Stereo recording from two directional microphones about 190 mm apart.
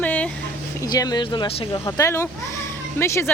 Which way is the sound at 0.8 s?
20° left (ahead or behind).